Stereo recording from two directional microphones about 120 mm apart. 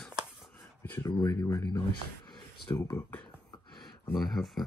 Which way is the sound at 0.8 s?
15° left (ahead or behind).